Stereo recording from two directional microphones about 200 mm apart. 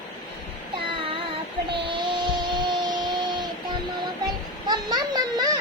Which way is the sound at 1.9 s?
25° right (ahead or behind).